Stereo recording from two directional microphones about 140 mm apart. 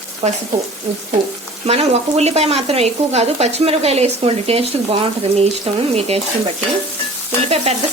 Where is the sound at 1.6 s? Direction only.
50° right (ahead or behind).